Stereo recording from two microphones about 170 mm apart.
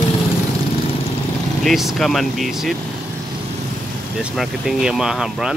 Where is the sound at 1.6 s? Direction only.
Centre (ahead or behind).